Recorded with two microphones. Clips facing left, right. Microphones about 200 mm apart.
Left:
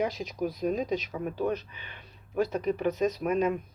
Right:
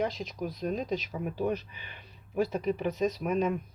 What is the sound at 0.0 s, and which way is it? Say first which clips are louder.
Speech: left 2 dB; 5° left (ahead or behind).